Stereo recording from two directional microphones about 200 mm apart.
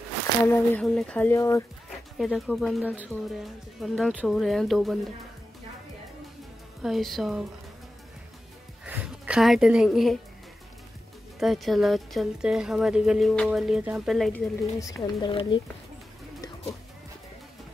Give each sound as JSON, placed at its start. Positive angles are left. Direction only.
{"t": 0.5, "sound": "a sound", "side_deg": 5}
{"t": 1.9, "sound": "speech", "side_deg": 0}
{"t": 6.8, "sound": "speech", "side_deg": 0}
{"t": 8.8, "sound": "a sound", "side_deg": -5}
{"t": 11.3, "sound": "speech", "side_deg": 0}
{"t": 14.8, "sound": "a woman's voice", "side_deg": 15}